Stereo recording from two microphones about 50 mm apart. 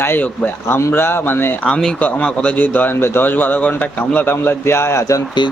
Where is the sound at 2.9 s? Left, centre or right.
Left.